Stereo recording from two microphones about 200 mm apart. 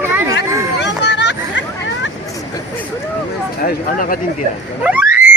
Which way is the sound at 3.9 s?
45° left (ahead or behind).